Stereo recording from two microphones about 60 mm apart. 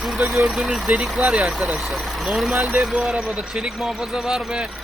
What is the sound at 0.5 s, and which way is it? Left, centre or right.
Speech, centre.